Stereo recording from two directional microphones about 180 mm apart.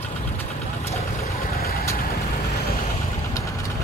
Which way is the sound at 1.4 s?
55° left (ahead or behind).